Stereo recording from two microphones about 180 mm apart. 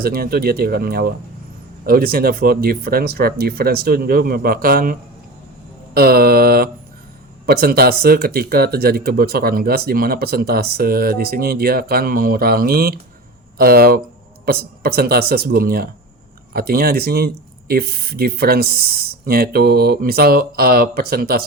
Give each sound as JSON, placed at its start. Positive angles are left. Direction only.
{"t": 0.0, "sound": "speech", "side_deg": -55}